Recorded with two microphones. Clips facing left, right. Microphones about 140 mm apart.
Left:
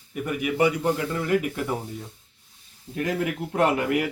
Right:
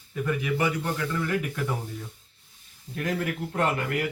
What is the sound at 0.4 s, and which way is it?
Speech, 20° left (ahead or behind).